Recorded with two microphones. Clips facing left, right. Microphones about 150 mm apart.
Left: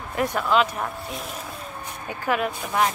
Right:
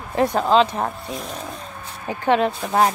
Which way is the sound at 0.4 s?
30° right (ahead or behind).